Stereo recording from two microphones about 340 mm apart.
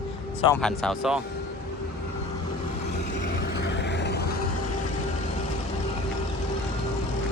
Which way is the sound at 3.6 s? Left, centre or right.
Left.